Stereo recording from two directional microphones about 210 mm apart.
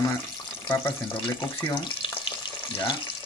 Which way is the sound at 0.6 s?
20° left (ahead or behind).